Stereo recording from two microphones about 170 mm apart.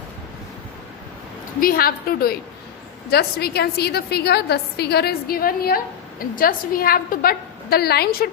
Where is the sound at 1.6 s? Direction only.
60° left (ahead or behind).